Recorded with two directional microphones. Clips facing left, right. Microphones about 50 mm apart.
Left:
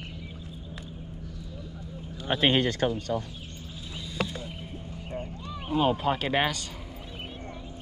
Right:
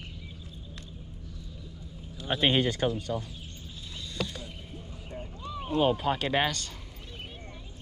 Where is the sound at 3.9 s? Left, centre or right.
Centre.